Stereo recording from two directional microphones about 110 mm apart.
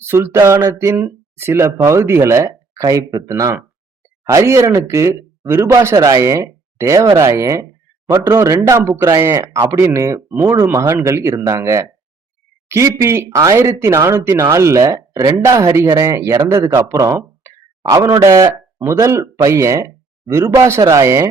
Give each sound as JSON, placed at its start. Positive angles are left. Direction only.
{"t": 0.0, "sound": "speech", "side_deg": -20}